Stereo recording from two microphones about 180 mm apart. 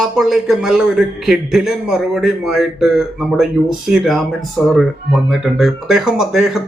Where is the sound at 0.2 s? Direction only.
Centre (ahead or behind).